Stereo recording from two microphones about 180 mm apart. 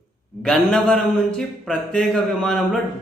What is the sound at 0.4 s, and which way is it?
A man's voice, 5° left (ahead or behind).